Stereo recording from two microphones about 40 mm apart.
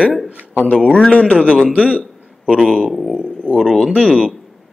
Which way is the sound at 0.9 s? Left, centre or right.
Left.